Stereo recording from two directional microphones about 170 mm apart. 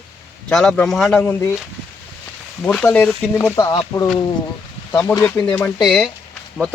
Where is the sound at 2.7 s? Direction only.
10° left (ahead or behind).